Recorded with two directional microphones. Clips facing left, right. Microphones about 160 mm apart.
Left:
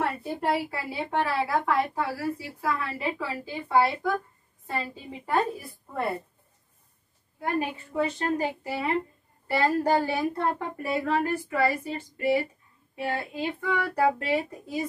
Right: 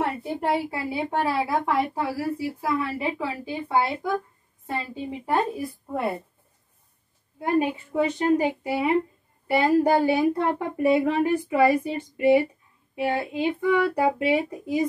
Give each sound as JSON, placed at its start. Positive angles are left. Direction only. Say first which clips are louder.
{"t": 0.0, "sound": "a woman's voice", "louder": "right 2 dB", "side_deg": -20}
{"t": 7.3, "sound": "speech", "louder": "right 6 dB", "side_deg": -25}